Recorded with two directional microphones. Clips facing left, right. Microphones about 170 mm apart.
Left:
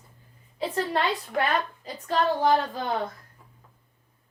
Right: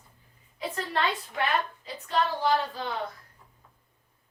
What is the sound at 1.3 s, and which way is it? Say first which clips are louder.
Speech: left 5 dB; 55° left (ahead or behind).